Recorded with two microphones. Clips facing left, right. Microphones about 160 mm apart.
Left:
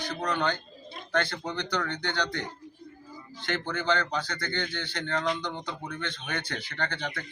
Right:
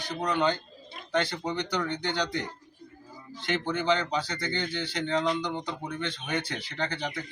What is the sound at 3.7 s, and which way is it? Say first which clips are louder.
Speech: right 2 dB; centre (ahead or behind).